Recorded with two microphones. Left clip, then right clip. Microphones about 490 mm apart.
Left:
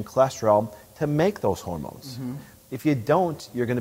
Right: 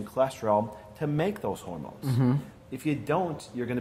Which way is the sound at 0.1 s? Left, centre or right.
Left.